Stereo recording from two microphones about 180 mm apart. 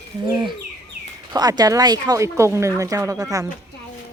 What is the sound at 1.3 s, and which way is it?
Speech, 20° right (ahead or behind).